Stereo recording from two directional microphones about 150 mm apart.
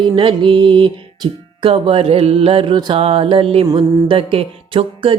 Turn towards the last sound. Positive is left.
turn(degrees=-40)  # may be behind; listen again after turning